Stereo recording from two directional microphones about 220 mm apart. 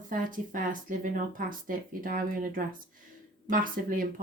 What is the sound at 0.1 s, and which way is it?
Speech, 40° right (ahead or behind).